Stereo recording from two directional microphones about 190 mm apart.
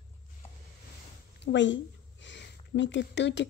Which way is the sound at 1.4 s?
75° left (ahead or behind).